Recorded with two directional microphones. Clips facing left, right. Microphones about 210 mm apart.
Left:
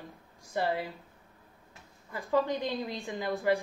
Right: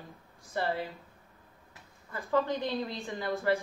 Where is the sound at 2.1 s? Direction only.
15° left (ahead or behind).